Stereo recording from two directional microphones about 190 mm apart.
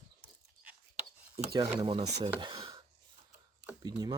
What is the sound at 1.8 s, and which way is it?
Speech, 25° right (ahead or behind).